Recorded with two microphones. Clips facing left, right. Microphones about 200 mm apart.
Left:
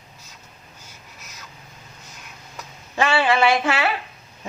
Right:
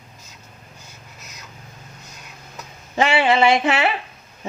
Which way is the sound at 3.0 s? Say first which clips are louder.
Right 2 dB; 20° right (ahead or behind).